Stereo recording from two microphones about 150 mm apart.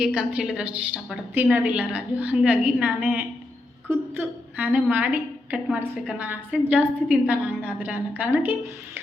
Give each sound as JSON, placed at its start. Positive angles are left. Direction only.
{"t": 0.0, "sound": "a woman's voice", "side_deg": -5}